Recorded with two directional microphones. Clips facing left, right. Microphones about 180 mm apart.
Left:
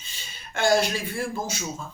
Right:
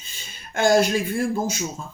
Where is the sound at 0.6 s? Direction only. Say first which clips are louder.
Right 4 dB; 45° right (ahead or behind).